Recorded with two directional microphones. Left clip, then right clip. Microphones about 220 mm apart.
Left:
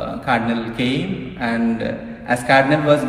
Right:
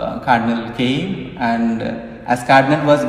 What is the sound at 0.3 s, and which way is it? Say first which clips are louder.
A man's voice: right 3 dB; 20° right (ahead or behind).